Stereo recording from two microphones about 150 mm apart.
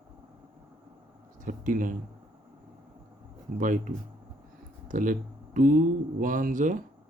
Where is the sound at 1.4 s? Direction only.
60° right (ahead or behind).